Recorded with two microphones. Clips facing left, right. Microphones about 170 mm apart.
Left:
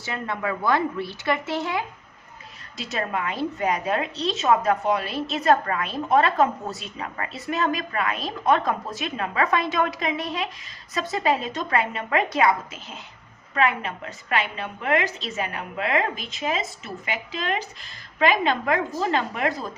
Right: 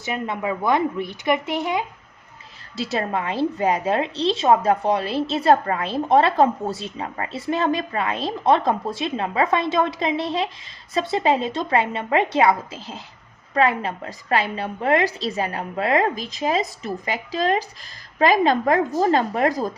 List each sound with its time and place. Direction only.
0.0 s a woman's voice: 20° right (ahead or behind)
2.7 s a woman's voice: 30° right (ahead or behind)